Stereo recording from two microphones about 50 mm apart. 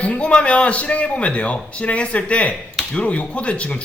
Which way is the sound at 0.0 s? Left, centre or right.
Left.